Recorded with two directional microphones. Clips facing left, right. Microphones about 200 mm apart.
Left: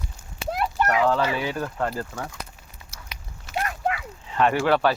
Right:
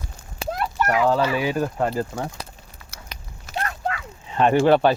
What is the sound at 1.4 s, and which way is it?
Speech, 15° right (ahead or behind).